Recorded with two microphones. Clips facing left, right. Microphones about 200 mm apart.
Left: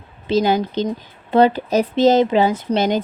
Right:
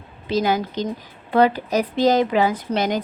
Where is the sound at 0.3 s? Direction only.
25° left (ahead or behind).